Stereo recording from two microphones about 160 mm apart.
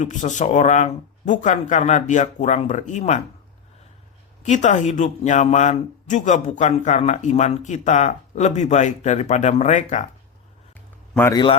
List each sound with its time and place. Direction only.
0.0 s speech: 50° left (ahead or behind)
4.4 s speech: 50° left (ahead or behind)
11.3 s a man's voice: 30° left (ahead or behind)